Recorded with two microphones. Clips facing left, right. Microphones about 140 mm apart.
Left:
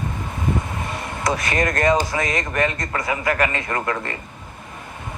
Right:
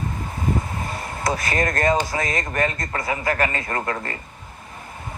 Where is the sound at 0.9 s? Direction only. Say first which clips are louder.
Left 1 dB; 25° left (ahead or behind).